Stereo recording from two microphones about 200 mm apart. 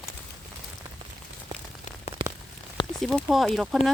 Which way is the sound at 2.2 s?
25° right (ahead or behind).